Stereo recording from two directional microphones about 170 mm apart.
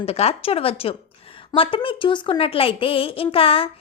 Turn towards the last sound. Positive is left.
turn(degrees=35)  # may be behind; listen again after turning